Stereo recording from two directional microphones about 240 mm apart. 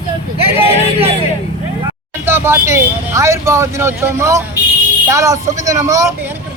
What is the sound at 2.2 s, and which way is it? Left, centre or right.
Speech, centre.